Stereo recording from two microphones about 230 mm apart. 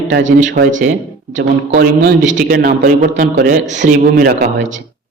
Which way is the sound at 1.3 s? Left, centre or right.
Right.